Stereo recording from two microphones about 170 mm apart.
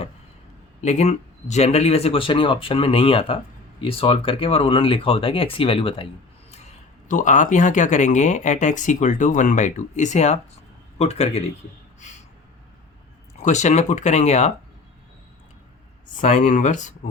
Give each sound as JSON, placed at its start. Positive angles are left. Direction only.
{"t": 0.8, "sound": "speech", "side_deg": 40}
{"t": 6.5, "sound": "speech", "side_deg": 45}
{"t": 13.4, "sound": "speech", "side_deg": 45}
{"t": 16.2, "sound": "speech", "side_deg": 45}